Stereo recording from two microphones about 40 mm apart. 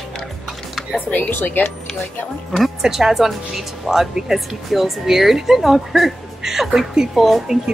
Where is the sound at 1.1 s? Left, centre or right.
Left.